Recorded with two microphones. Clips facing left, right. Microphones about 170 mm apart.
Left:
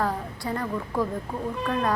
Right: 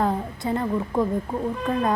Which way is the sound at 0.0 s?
25° right (ahead or behind).